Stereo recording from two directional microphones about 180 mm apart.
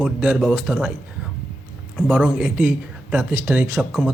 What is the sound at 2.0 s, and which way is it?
A man's voice, centre (ahead or behind).